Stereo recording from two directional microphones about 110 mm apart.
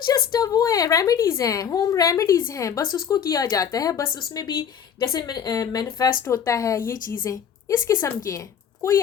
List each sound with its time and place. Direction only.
0.1 s a woman's voice: 35° left (ahead or behind)